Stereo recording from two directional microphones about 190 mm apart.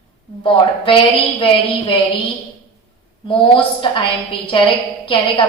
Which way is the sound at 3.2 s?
25° left (ahead or behind).